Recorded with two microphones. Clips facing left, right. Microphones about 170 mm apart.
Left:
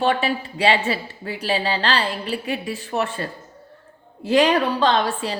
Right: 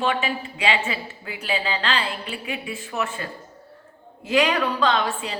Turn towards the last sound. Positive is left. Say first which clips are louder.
# left 3 dB
turn(degrees=35)  # may be behind; listen again after turning